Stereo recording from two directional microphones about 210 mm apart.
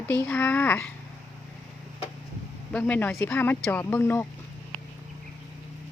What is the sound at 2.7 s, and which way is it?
Speech, 10° left (ahead or behind).